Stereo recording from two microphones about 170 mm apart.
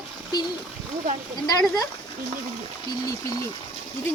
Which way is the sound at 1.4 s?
20° left (ahead or behind).